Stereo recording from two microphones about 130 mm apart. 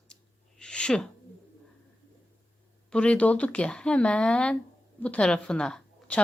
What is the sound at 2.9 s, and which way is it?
A woman's voice, 10° left (ahead or behind).